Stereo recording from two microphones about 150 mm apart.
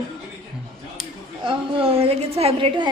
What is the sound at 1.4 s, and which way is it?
A woman's voice, 40° right (ahead or behind).